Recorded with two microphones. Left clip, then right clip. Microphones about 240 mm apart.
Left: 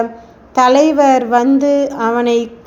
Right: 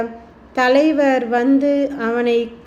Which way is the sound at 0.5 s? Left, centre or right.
Centre.